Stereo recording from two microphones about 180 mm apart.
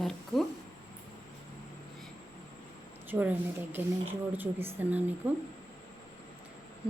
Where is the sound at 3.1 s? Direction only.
10° right (ahead or behind).